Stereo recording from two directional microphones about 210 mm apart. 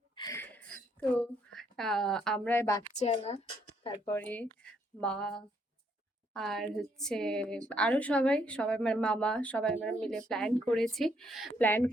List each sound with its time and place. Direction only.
0.2 s a sound: 15° left (ahead or behind)
3.0 s speech: 30° left (ahead or behind)
4.1 s speech: 5° left (ahead or behind)